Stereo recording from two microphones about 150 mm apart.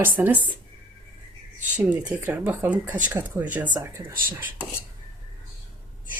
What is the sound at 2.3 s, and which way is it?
Speech, 10° right (ahead or behind).